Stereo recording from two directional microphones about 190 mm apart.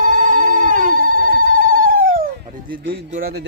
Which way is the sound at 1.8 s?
50° right (ahead or behind).